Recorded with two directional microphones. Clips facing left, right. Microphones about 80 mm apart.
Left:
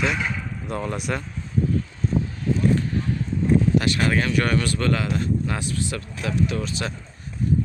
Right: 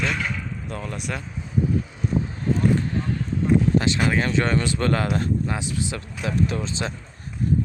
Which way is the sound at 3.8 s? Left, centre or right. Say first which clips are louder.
Even; centre.